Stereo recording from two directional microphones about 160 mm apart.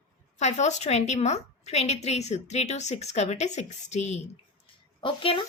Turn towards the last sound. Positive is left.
turn(degrees=30)  # may be behind; listen again after turning